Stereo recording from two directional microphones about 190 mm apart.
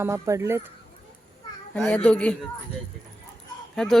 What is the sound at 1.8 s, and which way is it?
Speech, 5° left (ahead or behind).